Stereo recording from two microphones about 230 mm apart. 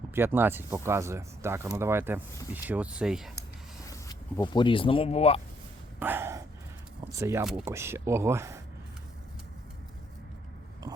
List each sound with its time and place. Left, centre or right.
0.1 s speech: centre
3.8 s speech: centre
6.0 s gasp: centre
7.0 s speech: centre
10.9 s a sound: centre